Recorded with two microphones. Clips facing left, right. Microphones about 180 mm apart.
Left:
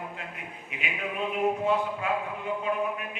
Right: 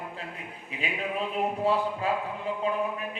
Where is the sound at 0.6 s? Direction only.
35° right (ahead or behind).